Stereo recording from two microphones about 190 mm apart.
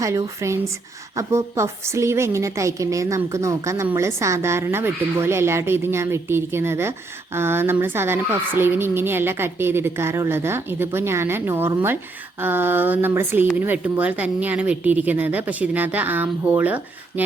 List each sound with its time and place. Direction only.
0.0 s speech: 15° right (ahead or behind)